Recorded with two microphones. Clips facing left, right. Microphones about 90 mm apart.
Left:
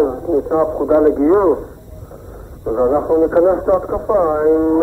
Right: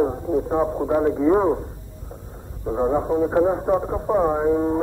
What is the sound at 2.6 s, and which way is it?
Speech, 30° left (ahead or behind).